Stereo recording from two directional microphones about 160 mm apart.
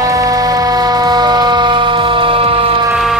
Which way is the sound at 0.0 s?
20° right (ahead or behind).